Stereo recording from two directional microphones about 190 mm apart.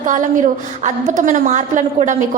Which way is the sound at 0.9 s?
40° right (ahead or behind).